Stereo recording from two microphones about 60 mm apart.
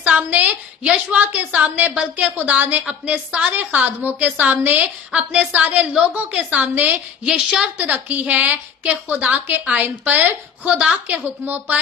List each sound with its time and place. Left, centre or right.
0.0 s a woman's voice: right
4.8 s a woman's voice: right
7.8 s a woman's voice: right